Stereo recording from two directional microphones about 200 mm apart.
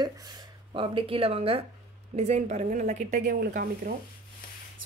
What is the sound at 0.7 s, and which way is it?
A woman's voice, 25° right (ahead or behind).